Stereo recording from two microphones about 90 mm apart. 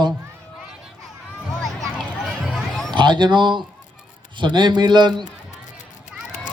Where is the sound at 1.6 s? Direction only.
Centre (ahead or behind).